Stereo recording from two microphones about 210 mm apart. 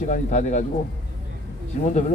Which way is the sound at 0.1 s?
35° left (ahead or behind).